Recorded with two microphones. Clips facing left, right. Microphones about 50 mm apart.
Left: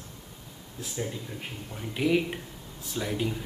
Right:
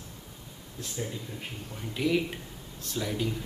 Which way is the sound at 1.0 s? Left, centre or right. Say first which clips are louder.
Left 2 dB; centre.